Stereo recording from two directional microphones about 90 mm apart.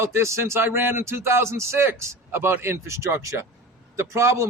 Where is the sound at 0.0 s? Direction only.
35° right (ahead or behind).